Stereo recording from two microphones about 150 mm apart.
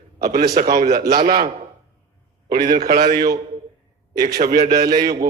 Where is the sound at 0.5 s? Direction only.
80° right.